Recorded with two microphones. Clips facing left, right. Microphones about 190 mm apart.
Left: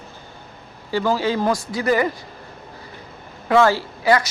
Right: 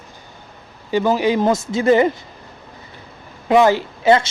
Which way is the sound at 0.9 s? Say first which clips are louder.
Right 4 dB; 20° right (ahead or behind).